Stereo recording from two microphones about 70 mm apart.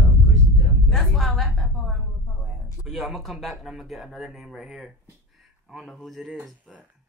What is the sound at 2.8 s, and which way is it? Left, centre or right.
Speech, centre.